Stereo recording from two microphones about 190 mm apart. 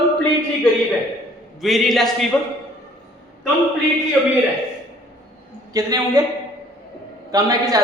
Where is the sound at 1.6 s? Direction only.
Centre (ahead or behind).